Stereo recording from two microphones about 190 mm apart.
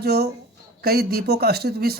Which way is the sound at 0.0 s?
55° right (ahead or behind).